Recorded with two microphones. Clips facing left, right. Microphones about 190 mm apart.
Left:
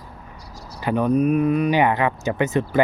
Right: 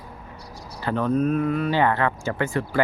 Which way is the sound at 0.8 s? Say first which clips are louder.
Left 3 dB; 15° left (ahead or behind).